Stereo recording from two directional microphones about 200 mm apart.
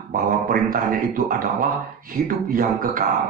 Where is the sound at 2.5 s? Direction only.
45° right (ahead or behind).